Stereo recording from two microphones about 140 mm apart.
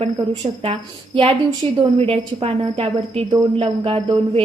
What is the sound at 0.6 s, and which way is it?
A woman's voice, 40° right (ahead or behind).